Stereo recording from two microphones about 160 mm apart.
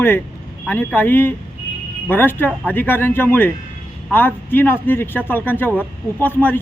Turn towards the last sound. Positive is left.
turn(degrees=10)  # may be behind; listen again after turning